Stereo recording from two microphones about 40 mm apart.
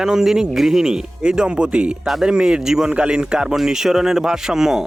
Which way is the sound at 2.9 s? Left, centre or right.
Right.